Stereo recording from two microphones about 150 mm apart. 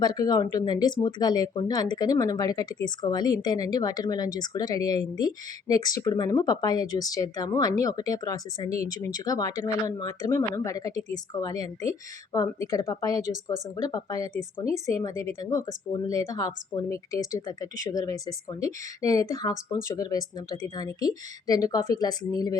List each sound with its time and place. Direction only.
0.0 s speech: 25° left (ahead or behind)